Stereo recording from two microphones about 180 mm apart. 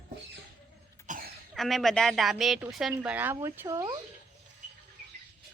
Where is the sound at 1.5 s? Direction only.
Centre (ahead or behind); by 3.9 s 15° right (ahead or behind).